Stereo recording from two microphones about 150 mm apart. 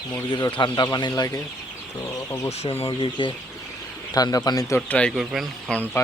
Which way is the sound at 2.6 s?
40° left (ahead or behind).